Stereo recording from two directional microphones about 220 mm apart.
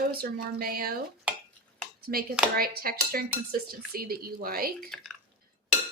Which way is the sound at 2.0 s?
45° right (ahead or behind).